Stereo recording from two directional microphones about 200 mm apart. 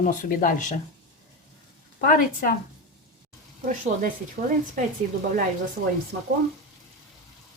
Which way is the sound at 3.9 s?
45° right (ahead or behind).